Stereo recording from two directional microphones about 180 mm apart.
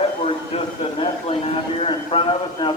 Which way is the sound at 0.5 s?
30° left (ahead or behind).